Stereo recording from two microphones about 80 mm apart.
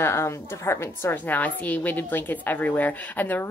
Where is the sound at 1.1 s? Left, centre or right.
Centre.